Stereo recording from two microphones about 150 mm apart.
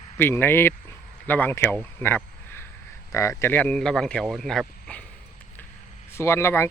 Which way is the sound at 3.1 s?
20° left (ahead or behind).